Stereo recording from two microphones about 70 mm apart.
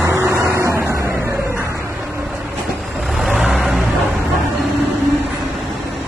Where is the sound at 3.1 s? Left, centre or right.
Centre.